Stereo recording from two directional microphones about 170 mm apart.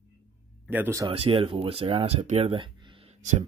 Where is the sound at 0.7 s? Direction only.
15° right (ahead or behind).